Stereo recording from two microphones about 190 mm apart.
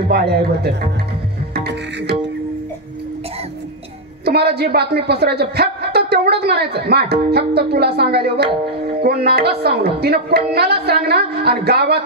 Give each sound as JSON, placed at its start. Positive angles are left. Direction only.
{"t": 0.1, "sound": "speech", "side_deg": -60}
{"t": 1.5, "sound": "music", "side_deg": -60}
{"t": 4.2, "sound": "a woman's voice", "side_deg": -60}